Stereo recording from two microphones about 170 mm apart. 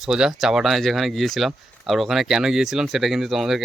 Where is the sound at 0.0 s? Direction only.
5° right (ahead or behind).